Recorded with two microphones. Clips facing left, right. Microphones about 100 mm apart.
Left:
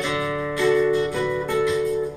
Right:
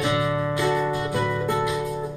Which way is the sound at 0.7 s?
20° right (ahead or behind).